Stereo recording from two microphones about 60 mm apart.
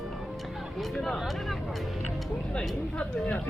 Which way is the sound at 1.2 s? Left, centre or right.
Centre.